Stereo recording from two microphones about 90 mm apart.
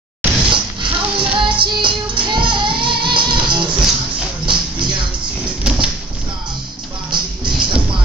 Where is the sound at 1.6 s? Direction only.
65° right (ahead or behind).